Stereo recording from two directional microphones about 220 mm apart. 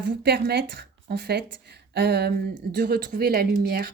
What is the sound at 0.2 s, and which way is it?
A woman's voice, 45° right (ahead or behind).